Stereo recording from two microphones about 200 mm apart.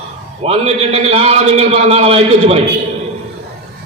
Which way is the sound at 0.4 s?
30° right (ahead or behind).